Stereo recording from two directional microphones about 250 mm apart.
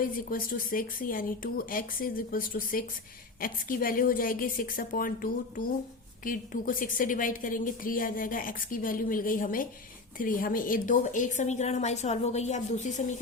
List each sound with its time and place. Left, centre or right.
0.0 s a woman's voice: left